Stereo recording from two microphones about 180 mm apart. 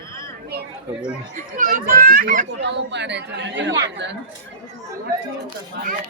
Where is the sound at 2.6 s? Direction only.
75° right (ahead or behind).